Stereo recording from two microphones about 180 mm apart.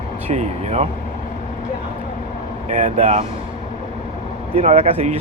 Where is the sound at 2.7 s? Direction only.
40° right (ahead or behind).